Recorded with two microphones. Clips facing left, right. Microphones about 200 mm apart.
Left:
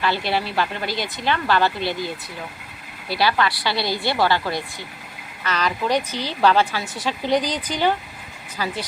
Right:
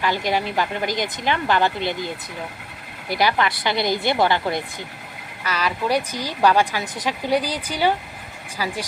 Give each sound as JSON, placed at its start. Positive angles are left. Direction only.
{"t": 0.0, "sound": "a woman's voice", "side_deg": -15}
{"t": 5.5, "sound": "a woman's voice", "side_deg": -10}